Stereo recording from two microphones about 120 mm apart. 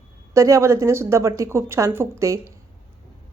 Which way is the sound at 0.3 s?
25° right (ahead or behind).